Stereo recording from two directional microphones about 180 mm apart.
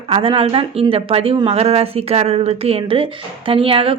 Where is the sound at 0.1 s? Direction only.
30° right (ahead or behind).